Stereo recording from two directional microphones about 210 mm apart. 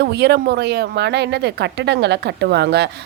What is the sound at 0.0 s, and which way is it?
Speech, 55° right (ahead or behind).